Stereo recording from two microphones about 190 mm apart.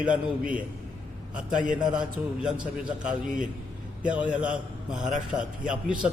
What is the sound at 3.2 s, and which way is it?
Speech, 45° right (ahead or behind).